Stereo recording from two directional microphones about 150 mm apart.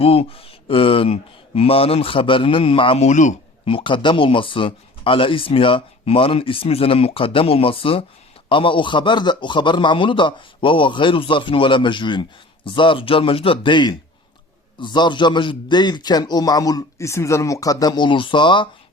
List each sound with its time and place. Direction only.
0.0 s speech: 40° left (ahead or behind)
3.1 s speech: 55° left (ahead or behind)
3.7 s a man's voice: 35° left (ahead or behind)